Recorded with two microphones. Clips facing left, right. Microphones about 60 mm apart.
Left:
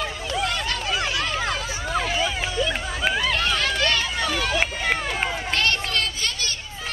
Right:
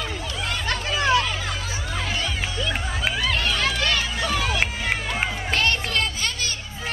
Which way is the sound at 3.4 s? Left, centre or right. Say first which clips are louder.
Left 1 dB; centre.